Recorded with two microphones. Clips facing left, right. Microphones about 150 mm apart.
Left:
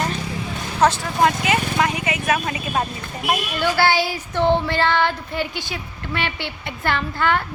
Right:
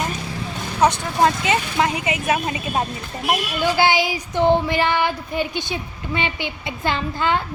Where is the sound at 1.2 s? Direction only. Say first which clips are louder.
Even; 25° right (ahead or behind).